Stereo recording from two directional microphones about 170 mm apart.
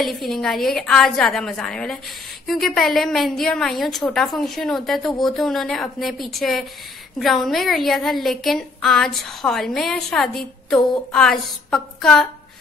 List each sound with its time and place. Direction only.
0.0 s a woman's voice: centre (ahead or behind)